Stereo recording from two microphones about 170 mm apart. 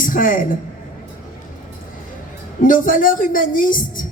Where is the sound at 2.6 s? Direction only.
55° left (ahead or behind).